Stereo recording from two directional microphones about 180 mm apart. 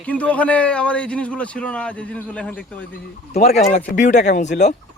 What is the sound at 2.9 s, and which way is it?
Speech, 40° left (ahead or behind).